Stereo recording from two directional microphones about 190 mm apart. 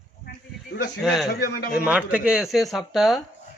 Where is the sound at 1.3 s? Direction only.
55° left (ahead or behind).